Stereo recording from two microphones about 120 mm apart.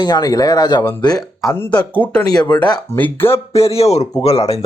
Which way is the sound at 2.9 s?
20° left (ahead or behind).